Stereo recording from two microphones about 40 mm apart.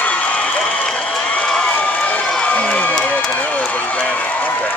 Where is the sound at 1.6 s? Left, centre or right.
Left.